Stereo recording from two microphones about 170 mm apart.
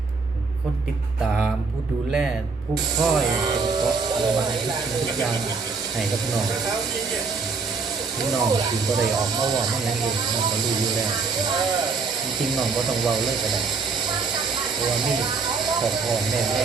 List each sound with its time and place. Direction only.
3.0 s speech: centre (ahead or behind)
3.4 s speech: 25° right (ahead or behind)
8.4 s speech: 20° right (ahead or behind)
12.4 s speech: centre (ahead or behind)
15.6 s speech: centre (ahead or behind)